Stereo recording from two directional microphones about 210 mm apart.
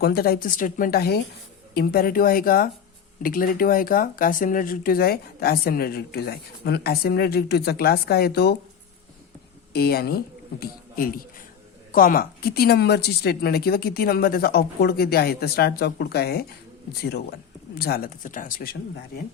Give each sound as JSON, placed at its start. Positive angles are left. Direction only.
{"t": 0.0, "sound": "speech", "side_deg": 45}
{"t": 9.7, "sound": "speech", "side_deg": 50}